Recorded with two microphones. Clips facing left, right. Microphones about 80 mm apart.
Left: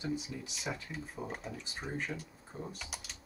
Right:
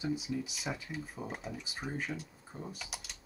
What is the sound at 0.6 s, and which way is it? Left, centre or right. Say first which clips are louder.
Speech: right 1 dB; centre.